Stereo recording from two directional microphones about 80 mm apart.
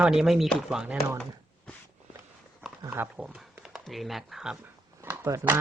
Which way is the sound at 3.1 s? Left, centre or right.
Centre.